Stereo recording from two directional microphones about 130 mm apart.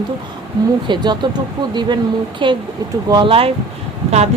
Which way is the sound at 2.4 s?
40° right (ahead or behind).